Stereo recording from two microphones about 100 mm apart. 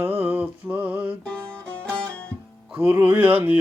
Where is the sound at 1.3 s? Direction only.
10° left (ahead or behind).